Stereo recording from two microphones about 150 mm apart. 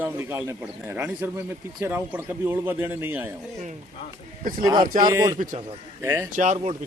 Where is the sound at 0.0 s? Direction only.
15° right (ahead or behind).